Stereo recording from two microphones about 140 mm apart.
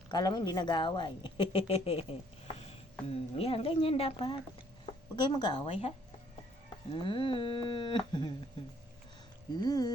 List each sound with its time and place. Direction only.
0.1 s a woman's voice: 30° left (ahead or behind)
6.9 s speech: 40° left (ahead or behind)
9.6 s speech: 30° left (ahead or behind)